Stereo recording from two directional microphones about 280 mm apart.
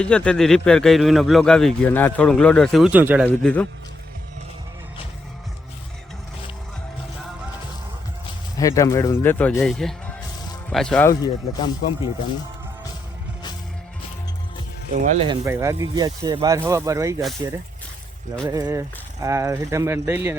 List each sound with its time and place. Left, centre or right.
0.0 s a man's voice: centre
3.2 s a man's voice: centre
8.5 s speech: centre
15.0 s speech: centre
18.4 s speech: centre